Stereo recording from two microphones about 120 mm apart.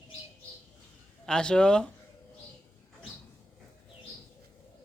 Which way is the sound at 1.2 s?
5° left (ahead or behind).